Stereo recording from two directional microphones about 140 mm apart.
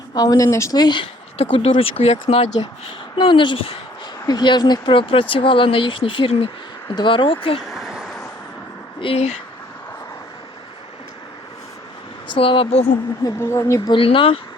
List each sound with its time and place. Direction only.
0.1 s speech: 25° left (ahead or behind); by 2.5 s 45° left (ahead or behind)
3.2 s speech: 35° left (ahead or behind)
7.6 s vehicle: centre (ahead or behind)
9.0 s speech: 45° left (ahead or behind)
12.3 s speech: 40° left (ahead or behind)
13.2 s speech: 20° left (ahead or behind)
13.9 s speech: 40° left (ahead or behind)